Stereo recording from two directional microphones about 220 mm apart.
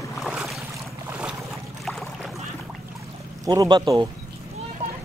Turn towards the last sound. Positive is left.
turn(degrees=-15)  # may be behind; listen again after turning